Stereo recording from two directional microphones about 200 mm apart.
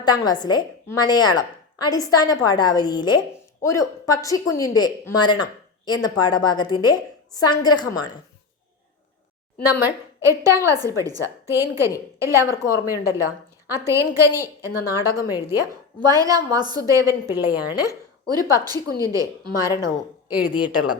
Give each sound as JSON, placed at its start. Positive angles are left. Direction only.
{"t": 0.0, "sound": "a woman's voice", "side_deg": 20}
{"t": 9.8, "sound": "a woman's voice", "side_deg": -15}
{"t": 20.6, "sound": "speech", "side_deg": -5}